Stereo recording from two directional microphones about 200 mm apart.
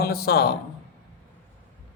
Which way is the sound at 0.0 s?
50° left (ahead or behind).